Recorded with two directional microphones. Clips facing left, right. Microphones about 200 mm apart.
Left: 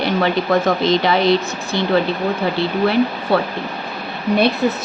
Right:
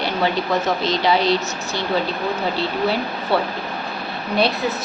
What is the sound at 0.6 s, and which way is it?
Speech, 55° left (ahead or behind).